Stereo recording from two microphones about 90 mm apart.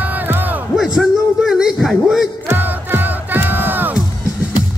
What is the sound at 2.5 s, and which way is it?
Music, 20° right (ahead or behind).